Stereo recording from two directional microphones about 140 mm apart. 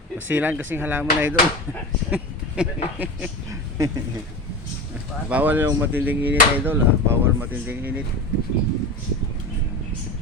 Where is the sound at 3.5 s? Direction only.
25° right (ahead or behind).